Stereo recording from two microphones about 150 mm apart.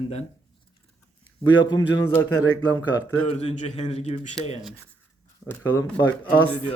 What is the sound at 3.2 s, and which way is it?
Speech, 45° left (ahead or behind).